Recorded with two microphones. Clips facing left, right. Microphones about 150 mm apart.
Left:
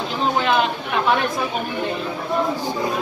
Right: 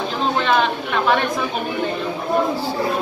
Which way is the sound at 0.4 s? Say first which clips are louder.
Right 1 dB; 5° left (ahead or behind).